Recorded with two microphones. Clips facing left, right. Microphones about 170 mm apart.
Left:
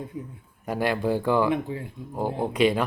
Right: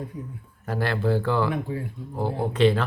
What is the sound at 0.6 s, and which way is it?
Speech, 15° left (ahead or behind).